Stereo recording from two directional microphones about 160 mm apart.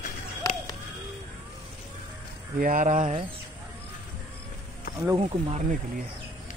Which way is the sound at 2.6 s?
55° right (ahead or behind).